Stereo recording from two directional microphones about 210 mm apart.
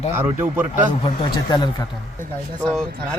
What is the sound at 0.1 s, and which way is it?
Speech, 10° right (ahead or behind).